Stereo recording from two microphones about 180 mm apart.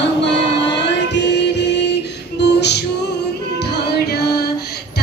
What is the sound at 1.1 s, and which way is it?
Music, 75° left (ahead or behind).